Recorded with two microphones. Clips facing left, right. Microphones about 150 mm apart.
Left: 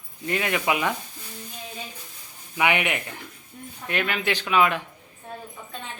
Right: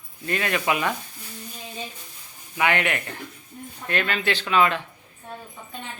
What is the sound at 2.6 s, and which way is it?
Speech, 15° left (ahead or behind).